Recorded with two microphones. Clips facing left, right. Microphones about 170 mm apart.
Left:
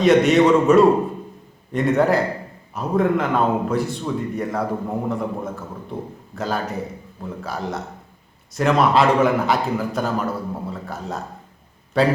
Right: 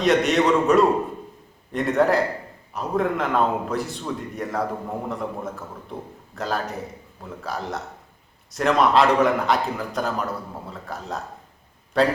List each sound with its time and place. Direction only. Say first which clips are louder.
0.0 s a man's voice: left 5 dB; centre (ahead or behind)